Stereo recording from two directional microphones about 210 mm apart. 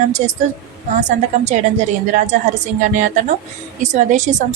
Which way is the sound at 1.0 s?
35° right (ahead or behind).